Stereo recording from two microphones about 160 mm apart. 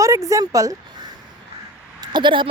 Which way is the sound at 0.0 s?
20° right (ahead or behind).